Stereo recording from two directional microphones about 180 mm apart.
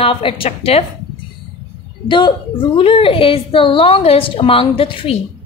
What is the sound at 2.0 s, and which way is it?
A woman's voice, 25° left (ahead or behind).